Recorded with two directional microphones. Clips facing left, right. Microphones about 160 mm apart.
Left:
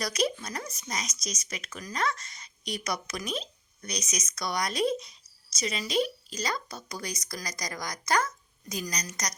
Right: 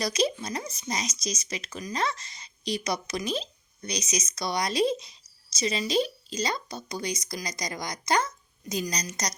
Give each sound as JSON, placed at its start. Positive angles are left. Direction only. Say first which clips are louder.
{"t": 0.0, "sound": "speech", "louder": "right 2 dB", "side_deg": -25}